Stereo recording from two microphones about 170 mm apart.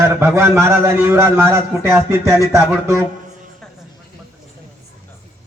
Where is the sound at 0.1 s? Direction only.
10° right (ahead or behind).